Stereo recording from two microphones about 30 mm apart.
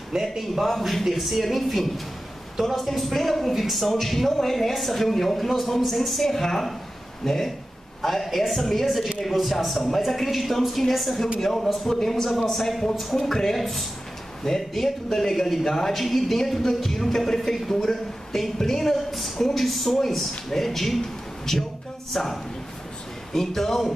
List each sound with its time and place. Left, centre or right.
0.2 s a woman's voice: centre
13.6 s a woman's voice: centre
22.1 s a woman's voice: centre